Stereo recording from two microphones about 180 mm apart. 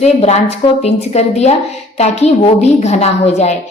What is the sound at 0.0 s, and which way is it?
A woman's voice, 35° left (ahead or behind).